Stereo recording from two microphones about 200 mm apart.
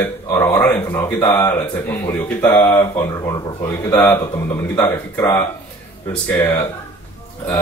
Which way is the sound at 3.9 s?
10° left (ahead or behind).